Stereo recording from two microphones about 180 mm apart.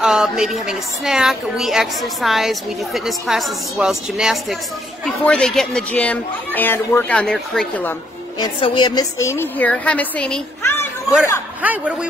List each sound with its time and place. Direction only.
0.0 s speech: centre (ahead or behind)
8.4 s speech: 25° left (ahead or behind)
11.6 s a man's voice: 10° right (ahead or behind)